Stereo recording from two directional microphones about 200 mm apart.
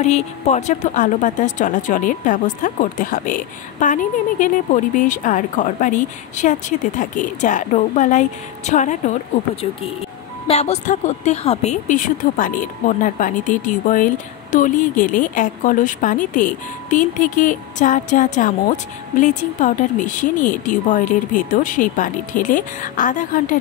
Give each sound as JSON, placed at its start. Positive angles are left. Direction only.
{"t": 0.0, "sound": "a woman's voice", "side_deg": 35}